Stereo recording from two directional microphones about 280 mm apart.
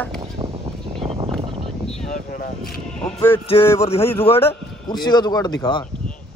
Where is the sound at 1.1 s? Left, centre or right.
Centre.